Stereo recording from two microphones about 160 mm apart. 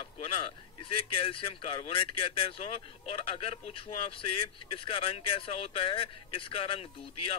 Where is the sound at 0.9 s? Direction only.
35° left (ahead or behind).